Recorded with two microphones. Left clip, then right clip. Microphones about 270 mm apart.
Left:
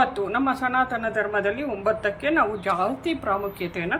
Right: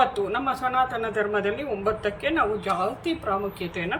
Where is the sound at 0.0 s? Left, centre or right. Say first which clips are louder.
Left 1 dB; centre.